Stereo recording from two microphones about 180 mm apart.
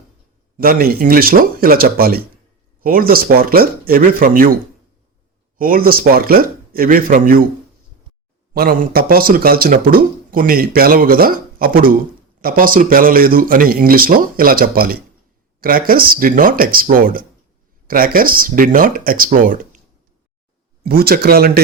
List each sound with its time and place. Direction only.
0.5 s speech: 55° right (ahead or behind)
5.5 s speech: 50° right (ahead or behind)
8.5 s speech: 55° right (ahead or behind)
20.8 s speech: 60° right (ahead or behind)